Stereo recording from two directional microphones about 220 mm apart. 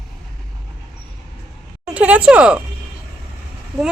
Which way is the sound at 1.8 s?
5° right (ahead or behind).